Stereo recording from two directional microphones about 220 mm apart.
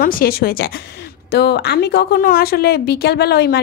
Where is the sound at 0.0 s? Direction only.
40° left (ahead or behind).